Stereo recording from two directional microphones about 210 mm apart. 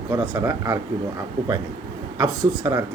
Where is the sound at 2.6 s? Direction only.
20° right (ahead or behind).